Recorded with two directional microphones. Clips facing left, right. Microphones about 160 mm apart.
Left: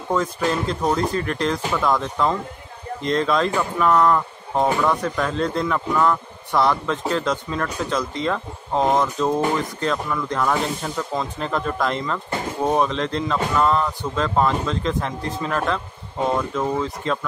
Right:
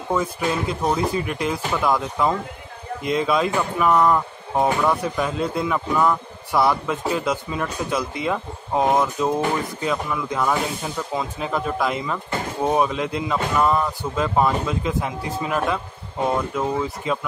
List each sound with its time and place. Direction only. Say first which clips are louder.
0.1 s speech: left 1 dB; 10° right (ahead or behind)